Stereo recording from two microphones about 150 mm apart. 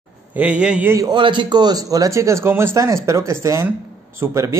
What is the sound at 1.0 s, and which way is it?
A man's voice, 30° right (ahead or behind).